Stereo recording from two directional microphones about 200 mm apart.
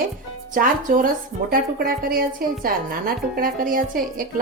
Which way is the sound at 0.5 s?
40° right (ahead or behind).